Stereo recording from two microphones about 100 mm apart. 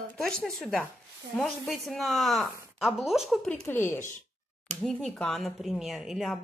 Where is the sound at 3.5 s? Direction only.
20° left (ahead or behind).